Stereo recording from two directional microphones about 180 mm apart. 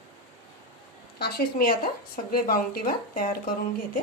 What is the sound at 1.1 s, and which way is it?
A woman's voice, 60° left (ahead or behind).